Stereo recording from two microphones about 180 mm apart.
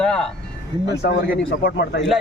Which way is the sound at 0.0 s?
5° left (ahead or behind).